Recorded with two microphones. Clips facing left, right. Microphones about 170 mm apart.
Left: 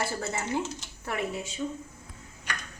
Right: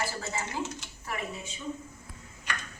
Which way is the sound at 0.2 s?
65° left (ahead or behind).